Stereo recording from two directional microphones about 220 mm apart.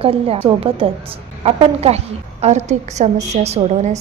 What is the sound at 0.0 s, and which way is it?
A woman's voice, 25° right (ahead or behind).